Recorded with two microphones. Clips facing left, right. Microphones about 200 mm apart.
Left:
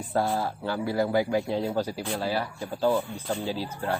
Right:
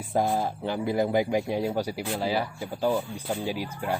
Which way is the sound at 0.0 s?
15° right (ahead or behind).